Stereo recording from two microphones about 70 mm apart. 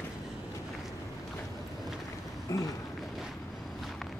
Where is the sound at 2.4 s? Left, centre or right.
Left.